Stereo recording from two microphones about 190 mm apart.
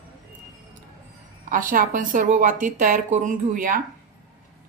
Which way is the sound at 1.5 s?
45° right (ahead or behind).